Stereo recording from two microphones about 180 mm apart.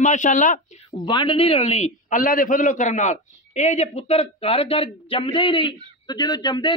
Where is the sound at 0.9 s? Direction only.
25° left (ahead or behind).